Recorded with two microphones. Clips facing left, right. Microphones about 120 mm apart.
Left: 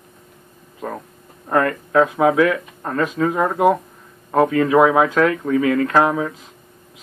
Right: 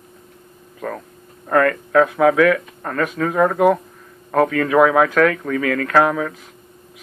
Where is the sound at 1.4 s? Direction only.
20° left (ahead or behind).